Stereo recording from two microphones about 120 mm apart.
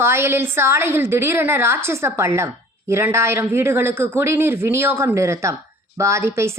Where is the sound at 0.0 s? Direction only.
20° right (ahead or behind).